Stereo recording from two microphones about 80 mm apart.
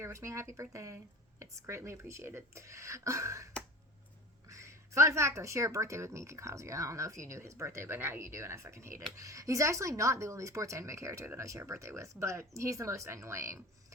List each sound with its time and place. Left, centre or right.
0.0 s a woman's voice: right